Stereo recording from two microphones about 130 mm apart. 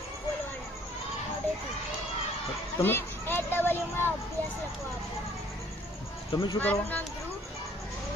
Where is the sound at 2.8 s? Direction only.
15° left (ahead or behind).